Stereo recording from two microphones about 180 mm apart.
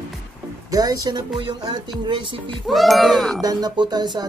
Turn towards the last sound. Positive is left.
turn(degrees=-25)  # may be behind; listen again after turning